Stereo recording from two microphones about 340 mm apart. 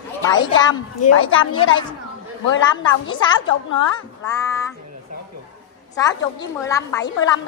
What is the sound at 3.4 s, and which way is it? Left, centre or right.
Speech, left.